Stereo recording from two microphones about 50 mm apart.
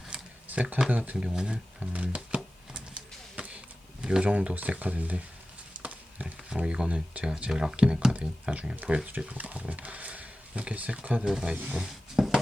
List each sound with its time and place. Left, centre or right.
0.4 s speech: right
1.1 s speech: centre
1.8 s a sound: right
4.0 s speech: centre
4.3 s speech: right
5.8 s a sound: right
6.5 s speech: centre
7.5 s speech: centre
7.8 s speech: right
9.0 s speech: right
11.3 s speech: centre
11.7 s a sound: centre